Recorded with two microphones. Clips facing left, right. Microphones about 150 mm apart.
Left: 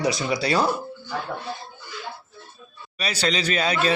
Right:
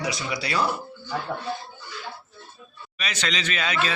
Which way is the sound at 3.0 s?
35° left (ahead or behind).